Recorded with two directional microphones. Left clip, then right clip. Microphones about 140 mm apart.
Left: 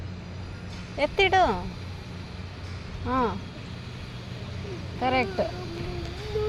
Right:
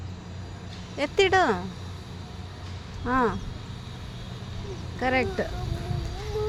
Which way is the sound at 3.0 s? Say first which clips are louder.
Right 2 dB; 50° right (ahead or behind).